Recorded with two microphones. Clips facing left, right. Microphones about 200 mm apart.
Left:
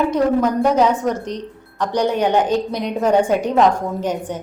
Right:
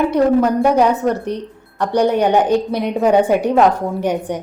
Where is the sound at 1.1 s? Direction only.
60° right (ahead or behind).